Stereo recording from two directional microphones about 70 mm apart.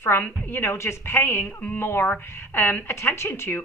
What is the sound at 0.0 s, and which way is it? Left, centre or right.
A woman's voice, left.